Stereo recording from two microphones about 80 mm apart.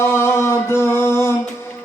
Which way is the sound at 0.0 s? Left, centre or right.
Left.